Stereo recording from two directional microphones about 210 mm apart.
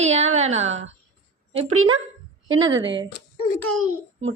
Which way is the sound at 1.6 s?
85° right.